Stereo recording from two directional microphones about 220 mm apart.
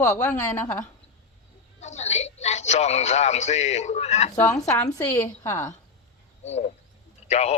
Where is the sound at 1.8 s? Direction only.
30° left (ahead or behind).